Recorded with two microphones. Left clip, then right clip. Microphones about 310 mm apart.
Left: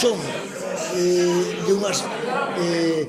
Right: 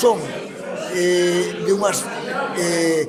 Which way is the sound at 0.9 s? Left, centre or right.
Right.